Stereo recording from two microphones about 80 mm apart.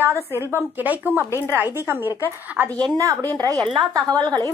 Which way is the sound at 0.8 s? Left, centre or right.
Right.